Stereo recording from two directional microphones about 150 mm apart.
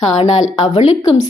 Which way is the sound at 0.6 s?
40° left (ahead or behind).